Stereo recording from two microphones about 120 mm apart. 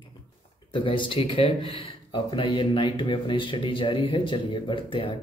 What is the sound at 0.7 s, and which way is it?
Speech, 45° left (ahead or behind).